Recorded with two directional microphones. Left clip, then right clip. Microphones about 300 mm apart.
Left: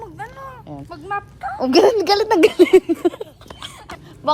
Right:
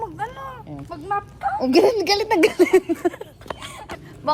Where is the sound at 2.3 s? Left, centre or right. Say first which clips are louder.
Left 4 dB; centre.